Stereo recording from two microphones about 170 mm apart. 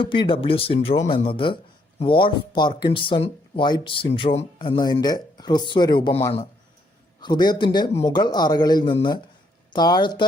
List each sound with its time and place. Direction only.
0.0 s speech: 30° left (ahead or behind)